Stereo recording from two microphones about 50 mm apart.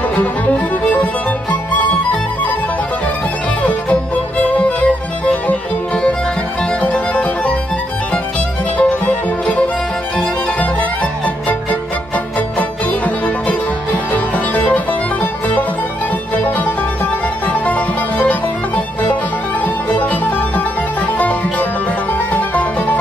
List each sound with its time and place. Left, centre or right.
3.6 s music: left
8.7 s music: left
16.3 s music: left
19.6 s music: left